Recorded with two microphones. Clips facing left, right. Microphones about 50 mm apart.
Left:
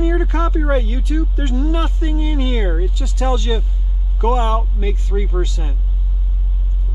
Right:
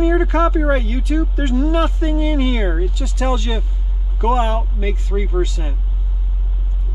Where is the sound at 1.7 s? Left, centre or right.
Right.